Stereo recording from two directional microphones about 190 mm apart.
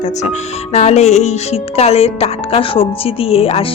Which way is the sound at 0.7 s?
35° left (ahead or behind).